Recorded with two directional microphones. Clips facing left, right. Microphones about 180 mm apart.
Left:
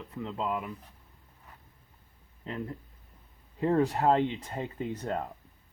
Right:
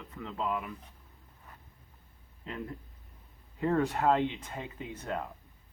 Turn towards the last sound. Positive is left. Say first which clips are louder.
# left 4 dB
turn(degrees=35)  # may be behind; listen again after turning